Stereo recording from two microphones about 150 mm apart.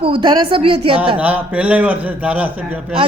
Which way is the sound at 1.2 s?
10° right (ahead or behind).